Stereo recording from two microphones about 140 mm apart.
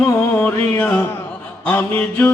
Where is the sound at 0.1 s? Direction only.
10° left (ahead or behind).